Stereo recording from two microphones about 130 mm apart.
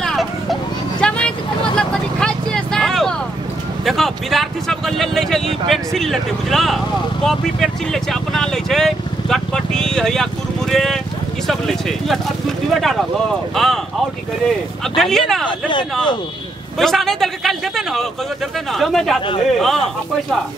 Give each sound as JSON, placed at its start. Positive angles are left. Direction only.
{"t": 0.0, "sound": "a sound", "side_deg": 0}
{"t": 1.0, "sound": "vehicle", "side_deg": 10}
{"t": 3.8, "sound": "a sound", "side_deg": 0}
{"t": 7.2, "sound": "speech", "side_deg": 0}
{"t": 15.0, "sound": "speech", "side_deg": 5}
{"t": 16.7, "sound": "speech", "side_deg": 0}